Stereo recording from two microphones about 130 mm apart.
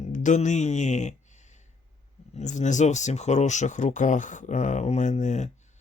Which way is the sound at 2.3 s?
65° left (ahead or behind).